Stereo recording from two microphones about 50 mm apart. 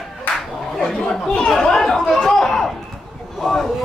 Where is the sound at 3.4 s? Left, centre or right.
Centre.